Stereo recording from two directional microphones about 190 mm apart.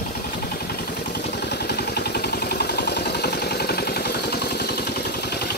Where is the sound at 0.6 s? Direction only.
60° left (ahead or behind).